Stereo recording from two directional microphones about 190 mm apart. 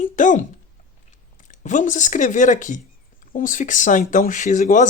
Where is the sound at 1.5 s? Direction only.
40° left (ahead or behind).